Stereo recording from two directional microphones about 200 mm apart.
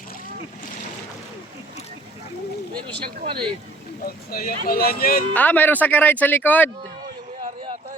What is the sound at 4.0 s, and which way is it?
Speech, 50° left (ahead or behind).